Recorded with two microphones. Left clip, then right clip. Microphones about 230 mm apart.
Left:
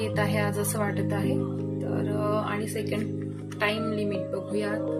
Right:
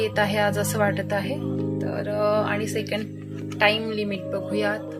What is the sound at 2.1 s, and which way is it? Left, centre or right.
Music, right.